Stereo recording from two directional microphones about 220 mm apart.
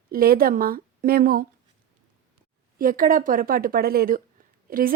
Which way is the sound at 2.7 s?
40° right (ahead or behind).